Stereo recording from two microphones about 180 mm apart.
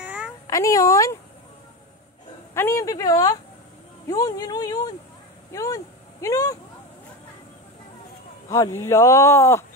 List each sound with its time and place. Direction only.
0.0 s meow: 10° right (ahead or behind)
0.5 s speech: 20° left (ahead or behind)
2.5 s speech: 15° left (ahead or behind)
8.5 s speech: 20° left (ahead or behind)